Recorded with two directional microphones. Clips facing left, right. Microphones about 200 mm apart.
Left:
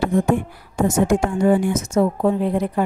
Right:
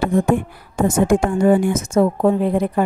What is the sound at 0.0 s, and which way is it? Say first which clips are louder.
A woman's voice: right 1 dB; 55° right (ahead or behind).